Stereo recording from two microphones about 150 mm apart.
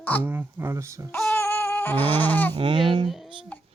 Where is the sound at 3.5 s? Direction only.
10° left (ahead or behind).